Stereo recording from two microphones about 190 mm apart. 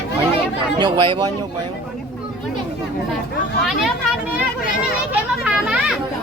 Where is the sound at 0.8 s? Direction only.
25° right (ahead or behind).